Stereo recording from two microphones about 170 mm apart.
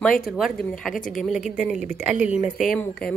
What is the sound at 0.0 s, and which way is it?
A woman's voice, 5° left (ahead or behind).